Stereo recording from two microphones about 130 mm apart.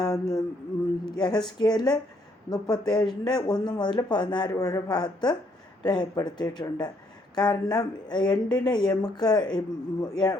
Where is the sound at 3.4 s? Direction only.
30° left (ahead or behind).